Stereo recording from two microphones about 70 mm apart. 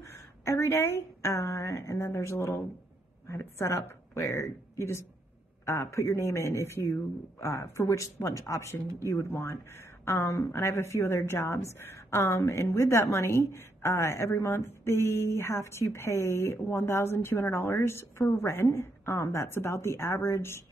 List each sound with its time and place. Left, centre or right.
0.0 s a woman's voice: left